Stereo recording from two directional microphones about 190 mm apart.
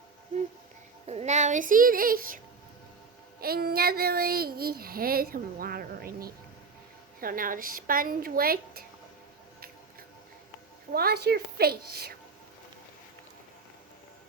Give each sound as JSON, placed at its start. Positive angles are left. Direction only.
{"t": 1.0, "sound": "child singing", "side_deg": -35}
{"t": 3.4, "sound": "child singing", "side_deg": -55}
{"t": 10.9, "sound": "a woman's voice", "side_deg": -55}